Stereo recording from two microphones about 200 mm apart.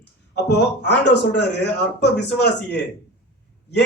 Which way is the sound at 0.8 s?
60° left (ahead or behind).